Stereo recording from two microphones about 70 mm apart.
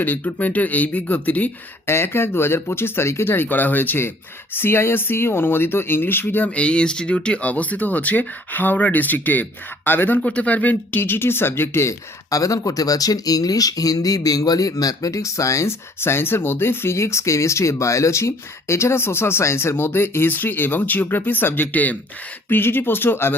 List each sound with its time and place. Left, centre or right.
0.0 s speech: left
1.9 s speech: left
6.5 s speech: centre; by 11.9 s left
12.3 s speech: left